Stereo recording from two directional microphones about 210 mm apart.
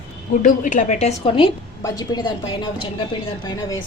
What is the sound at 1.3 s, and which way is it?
A woman's voice, 20° left (ahead or behind).